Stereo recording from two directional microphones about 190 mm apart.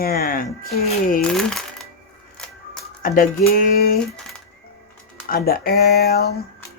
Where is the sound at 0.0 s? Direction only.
50° left (ahead or behind).